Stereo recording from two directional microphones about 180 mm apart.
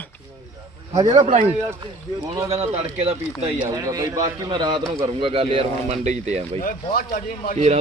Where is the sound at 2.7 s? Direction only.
35° right (ahead or behind).